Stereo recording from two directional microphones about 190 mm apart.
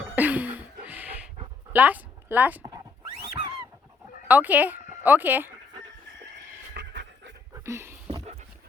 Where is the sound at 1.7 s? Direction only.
10° right (ahead or behind).